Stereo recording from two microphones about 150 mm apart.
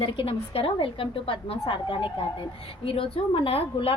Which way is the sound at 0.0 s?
35° left (ahead or behind).